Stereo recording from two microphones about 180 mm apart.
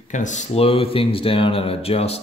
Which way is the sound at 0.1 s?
40° left (ahead or behind).